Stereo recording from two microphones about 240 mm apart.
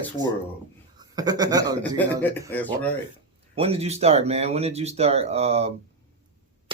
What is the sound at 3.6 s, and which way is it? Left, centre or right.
Speech, right.